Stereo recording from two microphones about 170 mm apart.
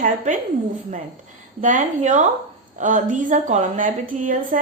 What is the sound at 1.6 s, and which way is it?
A woman's voice, 45° right (ahead or behind).